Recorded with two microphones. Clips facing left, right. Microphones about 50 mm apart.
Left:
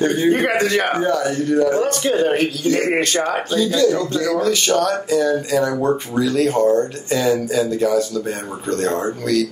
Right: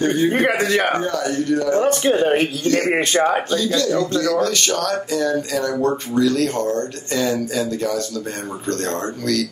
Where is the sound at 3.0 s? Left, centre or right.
Centre.